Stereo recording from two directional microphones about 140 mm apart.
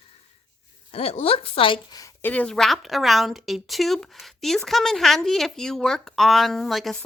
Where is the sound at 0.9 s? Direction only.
45° left (ahead or behind).